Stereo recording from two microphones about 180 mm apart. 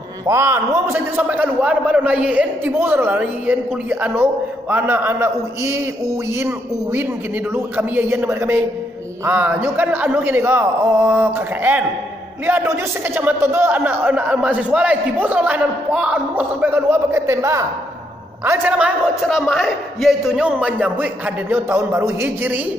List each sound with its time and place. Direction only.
0.3 s a man's voice: 15° right (ahead or behind)